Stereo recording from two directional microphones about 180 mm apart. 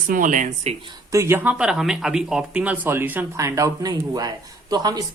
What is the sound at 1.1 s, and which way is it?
Speech, 15° right (ahead or behind).